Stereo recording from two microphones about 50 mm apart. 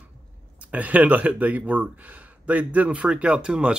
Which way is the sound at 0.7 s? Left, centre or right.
Right.